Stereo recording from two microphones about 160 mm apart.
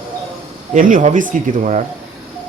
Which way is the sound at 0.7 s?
55° right (ahead or behind).